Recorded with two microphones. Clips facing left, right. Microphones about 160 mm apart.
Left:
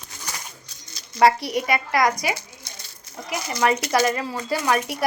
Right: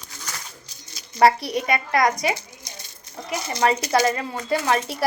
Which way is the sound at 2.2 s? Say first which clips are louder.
Right 2 dB; 20° right (ahead or behind).